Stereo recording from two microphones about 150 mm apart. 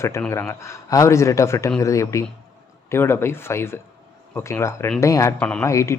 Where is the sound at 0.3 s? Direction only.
20° left (ahead or behind).